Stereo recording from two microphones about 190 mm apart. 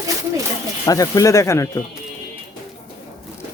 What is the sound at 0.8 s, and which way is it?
Speech, 20° left (ahead or behind).